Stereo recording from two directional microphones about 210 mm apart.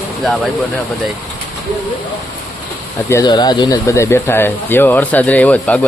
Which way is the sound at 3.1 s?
15° left (ahead or behind).